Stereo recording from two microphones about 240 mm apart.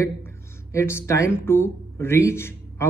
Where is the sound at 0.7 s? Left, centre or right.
Centre.